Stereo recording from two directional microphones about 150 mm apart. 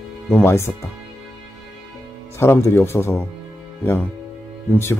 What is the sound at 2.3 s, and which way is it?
Speech, 15° left (ahead or behind).